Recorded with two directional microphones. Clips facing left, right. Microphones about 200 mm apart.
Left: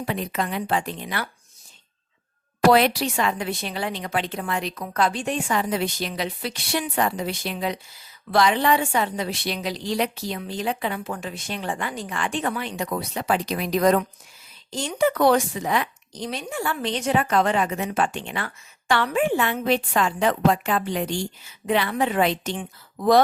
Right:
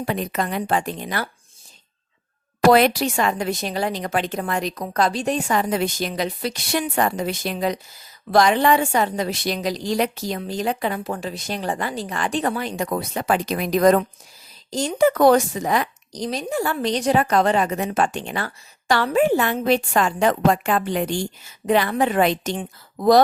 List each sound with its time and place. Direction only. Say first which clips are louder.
0.0 s a woman's voice: right 2 dB; 45° right (ahead or behind)
2.7 s a woman's voice: right 3 dB; 45° right (ahead or behind)